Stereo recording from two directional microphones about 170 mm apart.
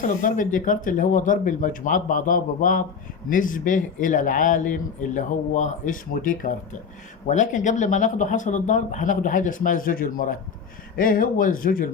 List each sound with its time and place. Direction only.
0.0 s a man's voice: 50° left (ahead or behind)